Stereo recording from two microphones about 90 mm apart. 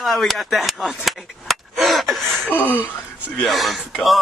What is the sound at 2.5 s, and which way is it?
Speech, 20° left (ahead or behind).